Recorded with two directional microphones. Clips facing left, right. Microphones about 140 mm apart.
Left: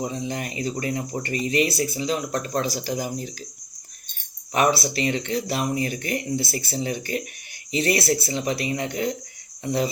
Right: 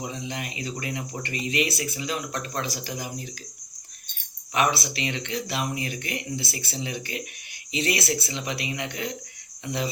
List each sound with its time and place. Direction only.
0.0 s speech: 40° left (ahead or behind)
4.5 s speech: 40° left (ahead or behind)